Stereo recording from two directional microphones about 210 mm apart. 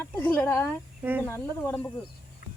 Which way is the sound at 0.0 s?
10° left (ahead or behind).